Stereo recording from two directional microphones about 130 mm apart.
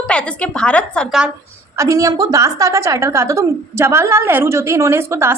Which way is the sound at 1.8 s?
25° right (ahead or behind).